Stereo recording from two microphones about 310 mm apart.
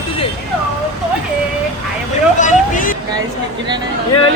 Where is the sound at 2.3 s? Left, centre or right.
Left.